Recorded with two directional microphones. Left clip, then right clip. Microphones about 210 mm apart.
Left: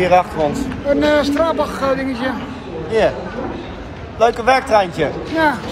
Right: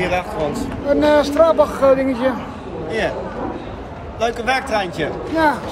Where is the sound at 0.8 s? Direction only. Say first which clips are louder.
Even; 25° right (ahead or behind).